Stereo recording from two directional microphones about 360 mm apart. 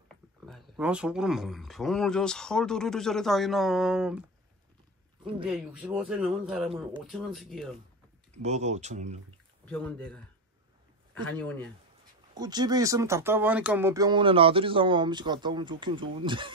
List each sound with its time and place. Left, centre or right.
0.5 s speech: centre
5.4 s speech: centre
8.4 s speech: centre
9.7 s speech: centre
11.2 s speech: centre
12.4 s speech: centre